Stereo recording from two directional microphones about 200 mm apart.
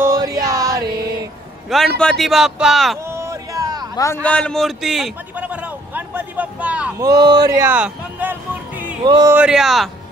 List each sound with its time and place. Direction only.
0.0 s music: 15° right (ahead or behind)
2.0 s a man's voice: 5° left (ahead or behind)
3.1 s a sound: 15° right (ahead or behind)
3.9 s a man's voice: 15° left (ahead or behind); by 7.0 s 5° right (ahead or behind)
7.0 s speech: 20° right (ahead or behind)
9.0 s speech: 20° right (ahead or behind)
9.3 s a man's voice: 5° right (ahead or behind)